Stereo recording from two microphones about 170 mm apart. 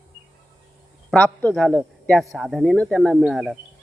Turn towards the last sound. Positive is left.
turn(degrees=0)  # may be behind; listen again after turning